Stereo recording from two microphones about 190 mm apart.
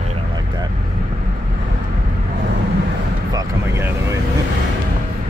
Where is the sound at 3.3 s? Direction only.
15° right (ahead or behind).